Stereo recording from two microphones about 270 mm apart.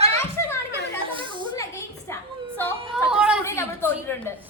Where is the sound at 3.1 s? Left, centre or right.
Centre.